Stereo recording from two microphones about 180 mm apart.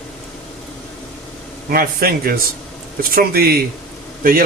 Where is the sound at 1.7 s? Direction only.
55° right (ahead or behind).